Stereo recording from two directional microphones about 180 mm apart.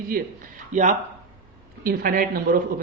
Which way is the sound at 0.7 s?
45° right (ahead or behind).